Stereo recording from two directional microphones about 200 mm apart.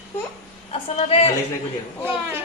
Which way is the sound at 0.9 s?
30° left (ahead or behind).